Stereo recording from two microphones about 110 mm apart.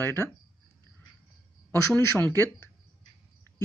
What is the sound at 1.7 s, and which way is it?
Speech, 20° left (ahead or behind).